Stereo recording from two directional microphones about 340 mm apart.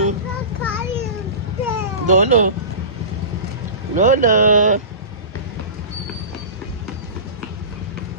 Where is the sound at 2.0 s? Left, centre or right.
Right.